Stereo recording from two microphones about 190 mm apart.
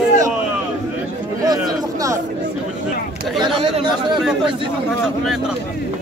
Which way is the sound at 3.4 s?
25° right (ahead or behind).